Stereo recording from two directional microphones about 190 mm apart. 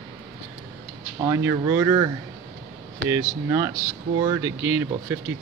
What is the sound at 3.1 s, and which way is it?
Speech, 15° right (ahead or behind).